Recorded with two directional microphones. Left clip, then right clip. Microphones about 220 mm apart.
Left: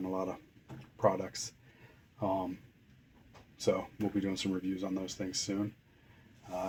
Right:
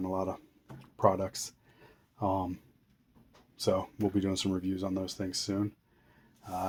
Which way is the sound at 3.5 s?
35° right (ahead or behind).